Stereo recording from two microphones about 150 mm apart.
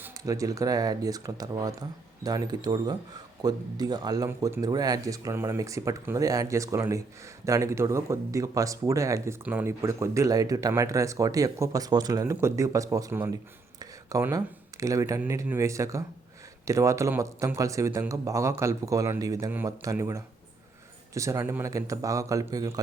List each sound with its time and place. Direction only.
0.0 s speech: 20° right (ahead or behind)